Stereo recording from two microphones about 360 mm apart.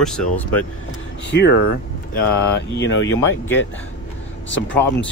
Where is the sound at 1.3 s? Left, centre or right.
Left.